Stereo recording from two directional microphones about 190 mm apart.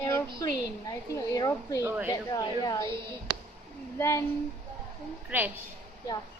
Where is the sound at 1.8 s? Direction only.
10° right (ahead or behind).